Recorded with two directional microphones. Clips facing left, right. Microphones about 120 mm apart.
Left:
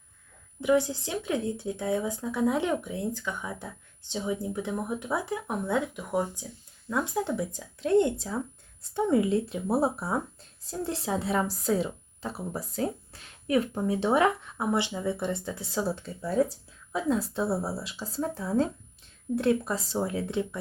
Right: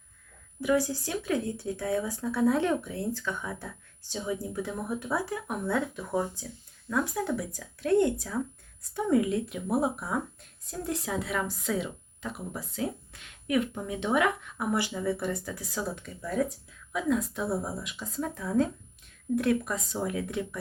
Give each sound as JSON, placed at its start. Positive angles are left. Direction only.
{"t": 0.6, "sound": "speech", "side_deg": 20}
{"t": 6.9, "sound": "speech", "side_deg": 25}